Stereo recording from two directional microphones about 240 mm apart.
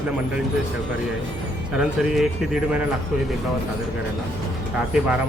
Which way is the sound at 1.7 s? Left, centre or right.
Centre.